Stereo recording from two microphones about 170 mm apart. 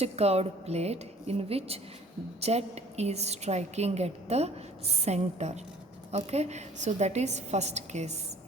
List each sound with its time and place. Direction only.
0.0 s a woman's voice: 35° right (ahead or behind)